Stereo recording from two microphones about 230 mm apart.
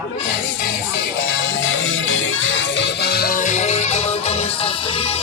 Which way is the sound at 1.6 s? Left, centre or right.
Left.